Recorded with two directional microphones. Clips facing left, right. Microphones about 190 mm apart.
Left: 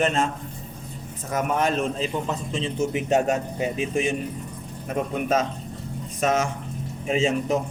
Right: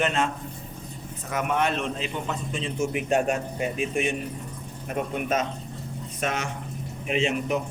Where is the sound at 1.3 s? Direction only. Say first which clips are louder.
Left 2 dB; 40° left (ahead or behind).